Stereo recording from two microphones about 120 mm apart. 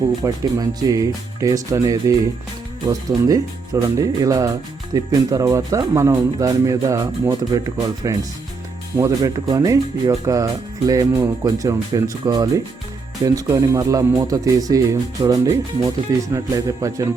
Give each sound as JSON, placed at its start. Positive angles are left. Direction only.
{"t": 0.2, "sound": "speech", "side_deg": -30}